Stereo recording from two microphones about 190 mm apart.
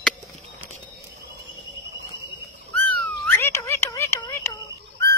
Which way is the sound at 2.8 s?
10° left (ahead or behind).